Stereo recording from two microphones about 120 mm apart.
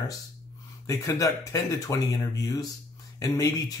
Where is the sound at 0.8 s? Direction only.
30° left (ahead or behind).